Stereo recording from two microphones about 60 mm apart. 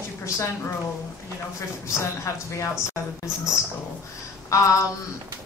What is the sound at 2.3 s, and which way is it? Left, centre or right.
Speech, left.